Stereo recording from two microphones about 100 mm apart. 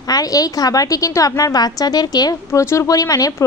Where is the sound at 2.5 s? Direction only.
30° left (ahead or behind).